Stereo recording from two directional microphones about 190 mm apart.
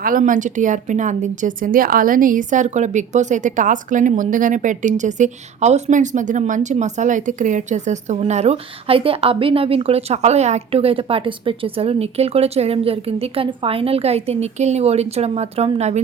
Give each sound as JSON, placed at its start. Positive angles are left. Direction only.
{"t": 0.0, "sound": "a woman's voice", "side_deg": -45}